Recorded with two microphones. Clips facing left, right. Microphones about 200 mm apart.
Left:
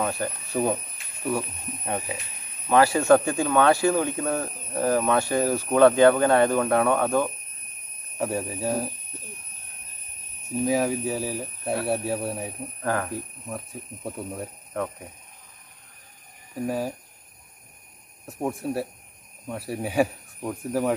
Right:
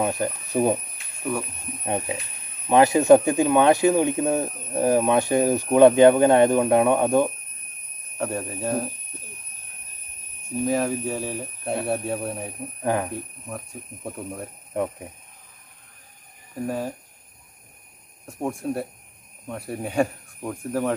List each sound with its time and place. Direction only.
0.0 s speech: 15° right (ahead or behind)
1.9 s speech: 20° right (ahead or behind)
8.2 s speech: 5° left (ahead or behind)
10.6 s speech: 5° left (ahead or behind)
12.8 s speech: 15° right (ahead or behind)
14.0 s speech: 5° left (ahead or behind)
16.6 s speech: 5° left (ahead or behind)
18.2 s speech: 5° left (ahead or behind)